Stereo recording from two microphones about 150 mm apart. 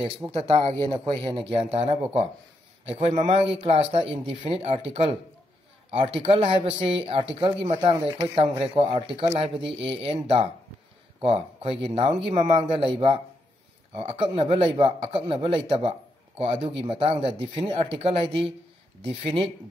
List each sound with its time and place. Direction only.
0.4 s a man's voice: 35° right (ahead or behind)
9.6 s speech: 5° right (ahead or behind)
9.8 s speech: 35° right (ahead or behind)